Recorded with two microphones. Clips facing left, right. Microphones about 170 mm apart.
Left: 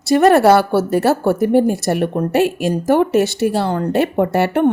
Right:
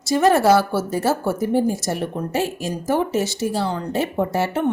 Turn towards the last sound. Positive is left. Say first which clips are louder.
# left 6 dB
turn(degrees=65)  # may be behind; listen again after turning